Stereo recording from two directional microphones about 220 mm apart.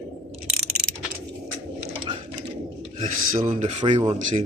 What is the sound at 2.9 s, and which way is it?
Speech, 35° right (ahead or behind).